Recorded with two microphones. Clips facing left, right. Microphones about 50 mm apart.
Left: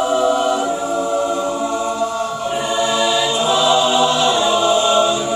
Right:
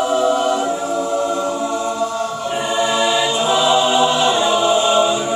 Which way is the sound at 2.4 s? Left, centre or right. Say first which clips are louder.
Even; centre.